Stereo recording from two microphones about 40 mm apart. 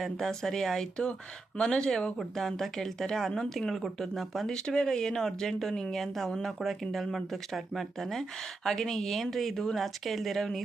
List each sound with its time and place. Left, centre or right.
0.0 s speech: centre
4.0 s speech: centre
4.4 s speech: centre